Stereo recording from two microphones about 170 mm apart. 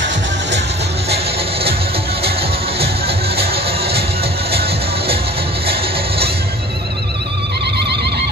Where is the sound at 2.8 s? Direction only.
35° right (ahead or behind).